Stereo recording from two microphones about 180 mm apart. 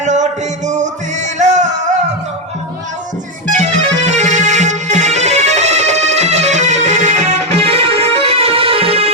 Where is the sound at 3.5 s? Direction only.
40° right (ahead or behind).